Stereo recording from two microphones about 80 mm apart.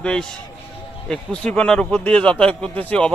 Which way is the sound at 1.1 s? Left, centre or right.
Centre.